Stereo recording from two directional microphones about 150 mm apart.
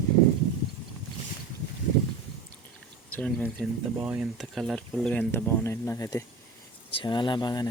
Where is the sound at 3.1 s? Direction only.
10° left (ahead or behind).